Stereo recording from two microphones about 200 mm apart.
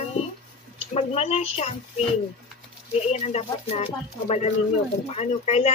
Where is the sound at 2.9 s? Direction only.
35° left (ahead or behind).